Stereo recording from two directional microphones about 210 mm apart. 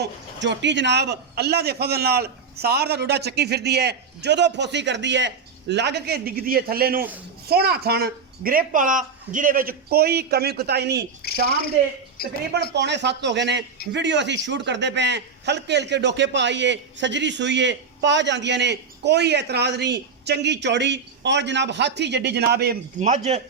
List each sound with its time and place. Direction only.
0.0 s a man's voice: 55° right (ahead or behind)
11.2 s a woman's voice: 50° left (ahead or behind)
12.7 s a man's voice: 55° right (ahead or behind); by 23.4 s 35° right (ahead or behind)